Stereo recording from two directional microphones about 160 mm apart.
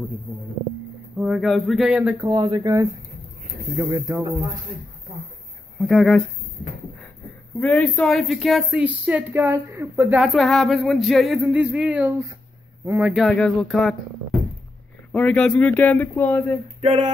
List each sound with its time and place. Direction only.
1.1 s speech: 5° right (ahead or behind)
2.2 s speech: 30° right (ahead or behind)
5.8 s speech: centre (ahead or behind)
7.6 s speech: 10° left (ahead or behind); by 10.2 s 15° right (ahead or behind)
10.2 s speech: centre (ahead or behind); by 13.1 s 15° right (ahead or behind)
13.3 s speech: 5° left (ahead or behind)
15.1 s speech: 5° left (ahead or behind)
16.8 s a sound: 35° right (ahead or behind)